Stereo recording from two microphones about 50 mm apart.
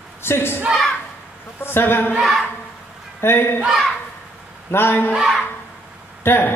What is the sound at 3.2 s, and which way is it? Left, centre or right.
Speech, left.